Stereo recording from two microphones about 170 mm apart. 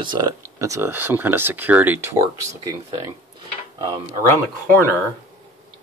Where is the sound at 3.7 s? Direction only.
25° right (ahead or behind).